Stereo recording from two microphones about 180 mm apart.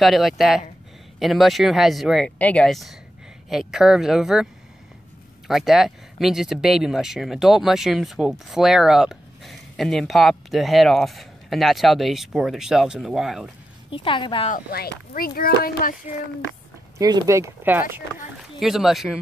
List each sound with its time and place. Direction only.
0.0 s speech: centre (ahead or behind)
5.5 s speech: centre (ahead or behind)
13.8 s a woman's voice: 30° left (ahead or behind)
14.5 s speech: 55° left (ahead or behind)
17.0 s speech: 20° right (ahead or behind); by 19.1 s centre (ahead or behind)